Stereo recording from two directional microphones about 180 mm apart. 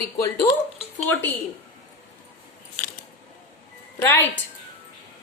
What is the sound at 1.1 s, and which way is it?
Speech, 10° left (ahead or behind).